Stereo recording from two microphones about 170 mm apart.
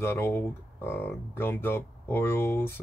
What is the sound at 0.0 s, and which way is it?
Speech, 10° left (ahead or behind).